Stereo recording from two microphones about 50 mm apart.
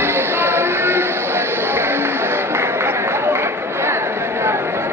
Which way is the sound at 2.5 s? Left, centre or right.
Right.